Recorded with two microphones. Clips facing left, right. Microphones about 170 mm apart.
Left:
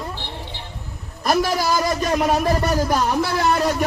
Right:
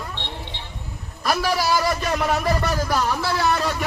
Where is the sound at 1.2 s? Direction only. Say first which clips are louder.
Left 3 dB; 45° left (ahead or behind).